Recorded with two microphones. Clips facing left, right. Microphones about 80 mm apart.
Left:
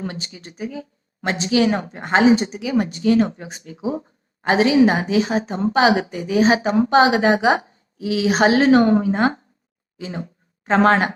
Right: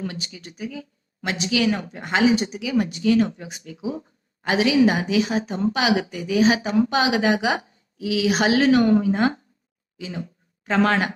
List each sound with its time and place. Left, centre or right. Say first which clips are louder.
0.0 s speech: left 2 dB; left